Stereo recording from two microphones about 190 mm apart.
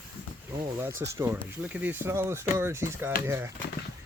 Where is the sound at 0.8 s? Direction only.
15° right (ahead or behind).